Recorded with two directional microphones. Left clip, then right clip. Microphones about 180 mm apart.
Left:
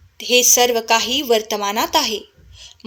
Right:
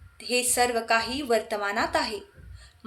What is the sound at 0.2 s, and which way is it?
A woman's voice, 40° left (ahead or behind).